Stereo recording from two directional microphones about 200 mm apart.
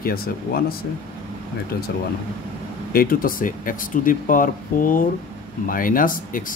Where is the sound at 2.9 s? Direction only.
45° left (ahead or behind).